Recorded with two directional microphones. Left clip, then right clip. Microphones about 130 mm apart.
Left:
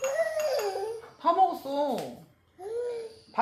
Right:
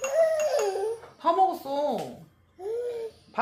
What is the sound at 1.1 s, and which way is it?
Speech, 15° right (ahead or behind).